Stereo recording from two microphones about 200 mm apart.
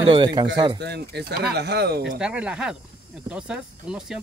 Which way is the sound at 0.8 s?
60° right (ahead or behind).